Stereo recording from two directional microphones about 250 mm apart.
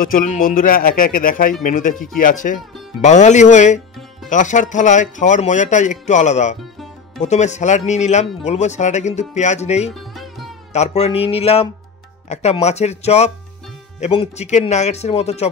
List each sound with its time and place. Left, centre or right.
0.0 s speech: left